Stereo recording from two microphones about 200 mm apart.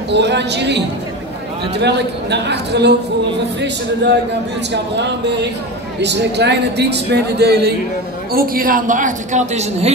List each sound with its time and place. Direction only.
0.1 s a man's voice: 60° right (ahead or behind); by 9.9 s 35° right (ahead or behind)